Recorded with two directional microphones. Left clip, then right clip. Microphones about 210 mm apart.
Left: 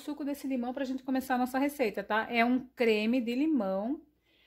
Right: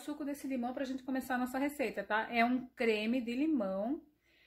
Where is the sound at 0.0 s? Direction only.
40° left (ahead or behind).